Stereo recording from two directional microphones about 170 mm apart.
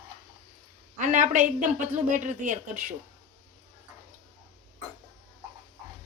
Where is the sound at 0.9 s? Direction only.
45° right (ahead or behind).